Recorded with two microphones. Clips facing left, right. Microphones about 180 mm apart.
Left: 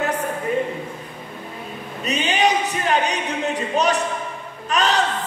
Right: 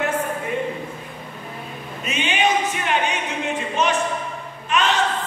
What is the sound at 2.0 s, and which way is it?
Speech, 40° left (ahead or behind).